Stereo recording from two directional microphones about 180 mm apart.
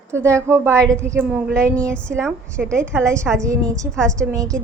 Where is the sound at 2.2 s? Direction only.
Centre (ahead or behind).